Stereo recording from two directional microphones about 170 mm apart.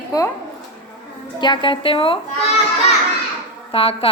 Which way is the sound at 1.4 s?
25° left (ahead or behind).